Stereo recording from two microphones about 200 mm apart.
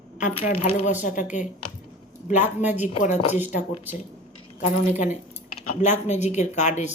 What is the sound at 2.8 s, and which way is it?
Speech, 35° left (ahead or behind).